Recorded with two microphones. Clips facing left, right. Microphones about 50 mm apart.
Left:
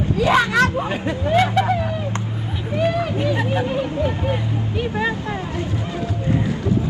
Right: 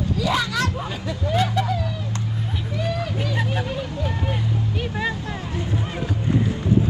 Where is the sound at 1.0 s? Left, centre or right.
Left.